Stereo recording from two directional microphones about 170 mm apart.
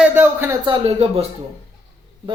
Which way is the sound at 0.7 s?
35° right (ahead or behind).